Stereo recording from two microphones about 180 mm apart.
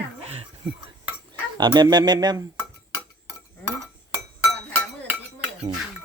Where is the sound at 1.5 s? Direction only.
25° right (ahead or behind).